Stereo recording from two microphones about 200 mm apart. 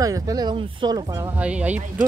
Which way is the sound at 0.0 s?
15° right (ahead or behind).